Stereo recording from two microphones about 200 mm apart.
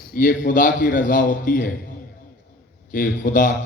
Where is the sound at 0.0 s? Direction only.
45° left (ahead or behind).